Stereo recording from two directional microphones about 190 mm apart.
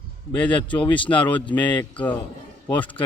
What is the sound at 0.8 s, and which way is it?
Speech, 25° left (ahead or behind).